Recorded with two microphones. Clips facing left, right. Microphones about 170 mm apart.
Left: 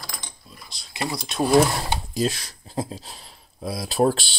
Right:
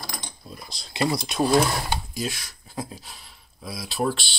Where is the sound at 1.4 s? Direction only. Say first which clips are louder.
Left 3 dB; 20° left (ahead or behind).